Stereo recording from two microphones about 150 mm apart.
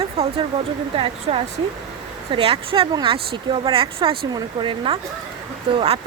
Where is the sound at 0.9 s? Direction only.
40° right (ahead or behind).